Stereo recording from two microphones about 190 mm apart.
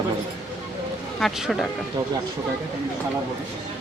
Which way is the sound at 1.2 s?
Centre (ahead or behind).